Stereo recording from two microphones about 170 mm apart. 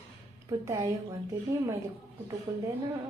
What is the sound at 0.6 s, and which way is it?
Speech, 20° right (ahead or behind).